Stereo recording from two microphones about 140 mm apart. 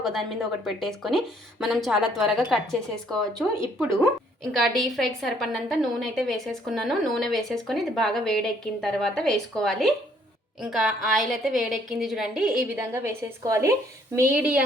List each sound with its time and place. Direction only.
0.0 s a woman's voice: centre (ahead or behind)
4.5 s a woman's voice: centre (ahead or behind)
12.8 s a woman's voice: 20° right (ahead or behind)